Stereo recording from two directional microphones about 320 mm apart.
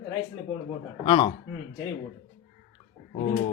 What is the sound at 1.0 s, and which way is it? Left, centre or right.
Speech, centre.